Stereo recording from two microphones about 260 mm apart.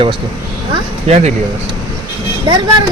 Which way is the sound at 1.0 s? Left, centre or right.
Right.